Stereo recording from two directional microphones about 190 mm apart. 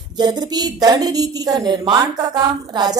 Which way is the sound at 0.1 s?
20° right (ahead or behind).